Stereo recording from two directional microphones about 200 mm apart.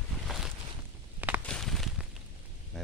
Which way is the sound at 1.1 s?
10° right (ahead or behind).